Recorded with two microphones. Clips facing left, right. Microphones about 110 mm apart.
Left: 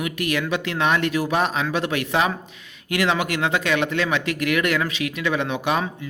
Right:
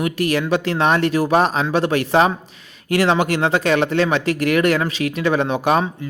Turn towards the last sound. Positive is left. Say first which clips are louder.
# right 5 dB
turn(degrees=-35)  # may be behind; listen again after turning